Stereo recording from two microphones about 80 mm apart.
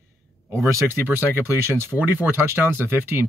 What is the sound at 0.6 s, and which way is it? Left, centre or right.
Speech, right.